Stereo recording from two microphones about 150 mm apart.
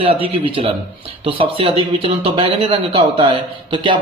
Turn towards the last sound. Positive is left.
turn(degrees=-30)  # may be behind; listen again after turning